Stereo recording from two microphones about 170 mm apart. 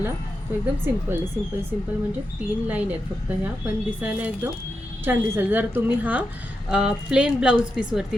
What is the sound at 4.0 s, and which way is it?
A woman's voice, 10° right (ahead or behind).